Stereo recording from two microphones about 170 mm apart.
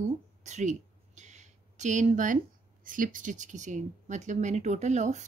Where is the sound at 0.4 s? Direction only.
45° right (ahead or behind).